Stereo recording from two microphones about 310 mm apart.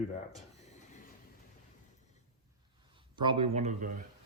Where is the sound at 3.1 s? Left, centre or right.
Centre.